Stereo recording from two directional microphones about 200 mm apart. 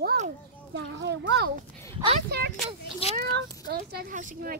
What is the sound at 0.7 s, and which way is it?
Speech, 65° right (ahead or behind).